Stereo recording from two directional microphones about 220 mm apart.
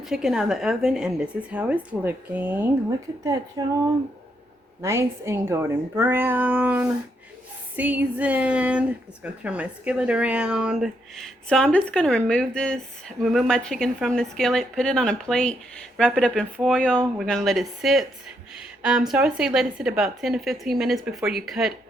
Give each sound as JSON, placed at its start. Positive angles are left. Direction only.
{"t": 0.0, "sound": "speech", "side_deg": 0}
{"t": 4.8, "sound": "speech", "side_deg": -10}